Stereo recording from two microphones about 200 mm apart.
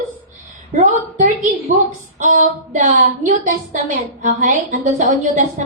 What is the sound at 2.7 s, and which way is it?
A woman's voice, 40° right (ahead or behind).